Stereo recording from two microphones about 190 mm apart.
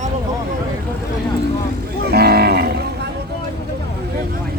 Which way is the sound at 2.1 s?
55° right (ahead or behind).